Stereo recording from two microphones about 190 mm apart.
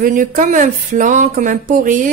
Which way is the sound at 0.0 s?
45° right (ahead or behind).